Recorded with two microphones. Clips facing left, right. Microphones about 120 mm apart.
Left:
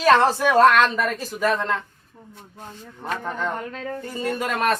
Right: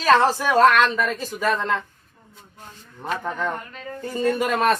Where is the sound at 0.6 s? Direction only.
15° left (ahead or behind).